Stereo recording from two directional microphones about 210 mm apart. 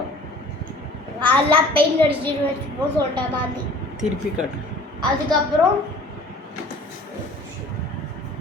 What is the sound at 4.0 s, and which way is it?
Speech, 5° right (ahead or behind).